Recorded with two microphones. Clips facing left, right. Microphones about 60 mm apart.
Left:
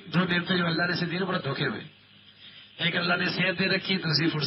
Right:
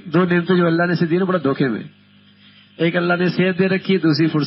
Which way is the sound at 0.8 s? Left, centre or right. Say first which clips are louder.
Right 9 dB; right.